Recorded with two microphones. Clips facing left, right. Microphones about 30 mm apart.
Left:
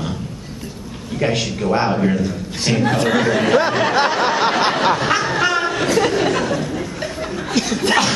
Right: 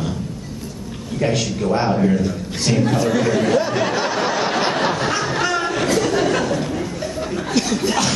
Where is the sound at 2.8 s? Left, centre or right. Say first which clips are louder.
Left 3 dB; left.